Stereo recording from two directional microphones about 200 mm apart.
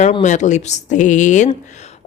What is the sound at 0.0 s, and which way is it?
A woman's voice, 35° left (ahead or behind).